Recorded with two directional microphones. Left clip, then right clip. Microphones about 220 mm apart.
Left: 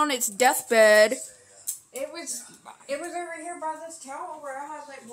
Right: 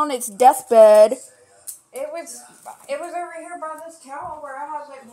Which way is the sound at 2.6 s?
45° left (ahead or behind).